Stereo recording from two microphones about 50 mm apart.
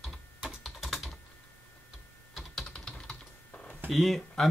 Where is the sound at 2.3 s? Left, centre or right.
Centre.